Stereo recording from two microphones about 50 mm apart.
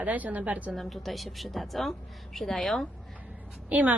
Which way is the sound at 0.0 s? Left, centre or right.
Right.